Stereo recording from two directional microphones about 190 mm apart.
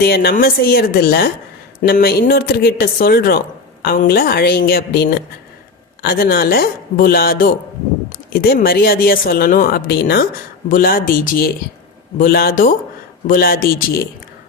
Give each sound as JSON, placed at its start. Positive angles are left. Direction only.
{"t": 0.0, "sound": "a woman's voice", "side_deg": 55}